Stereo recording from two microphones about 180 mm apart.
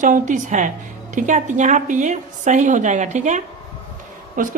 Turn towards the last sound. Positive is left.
turn(degrees=-50)  # may be behind; listen again after turning